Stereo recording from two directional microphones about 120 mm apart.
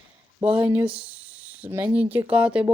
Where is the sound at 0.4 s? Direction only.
10° right (ahead or behind).